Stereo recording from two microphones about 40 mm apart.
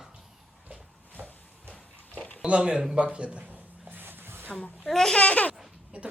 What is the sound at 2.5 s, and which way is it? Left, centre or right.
Speech, centre.